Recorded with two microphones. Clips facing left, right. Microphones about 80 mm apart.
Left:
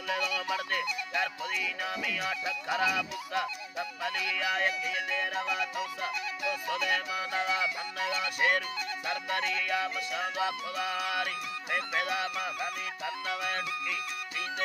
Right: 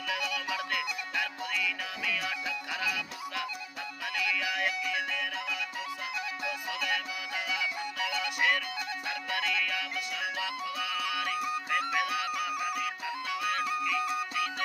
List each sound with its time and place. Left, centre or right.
0.1 s music: left
6.5 s music: left
13.6 s music: centre